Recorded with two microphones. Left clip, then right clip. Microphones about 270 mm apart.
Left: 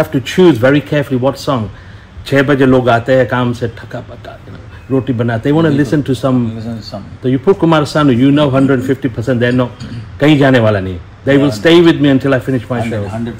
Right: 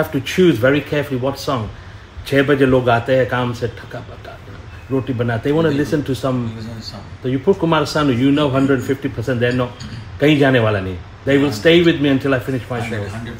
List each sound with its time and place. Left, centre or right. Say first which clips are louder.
0.1 s a man's voice: left 5 dB; centre
5.0 s a man's voice: left 5 dB; centre